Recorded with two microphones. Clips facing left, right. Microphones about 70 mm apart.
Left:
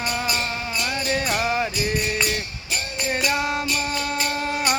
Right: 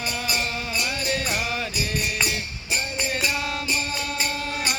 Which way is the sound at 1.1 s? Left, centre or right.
Left.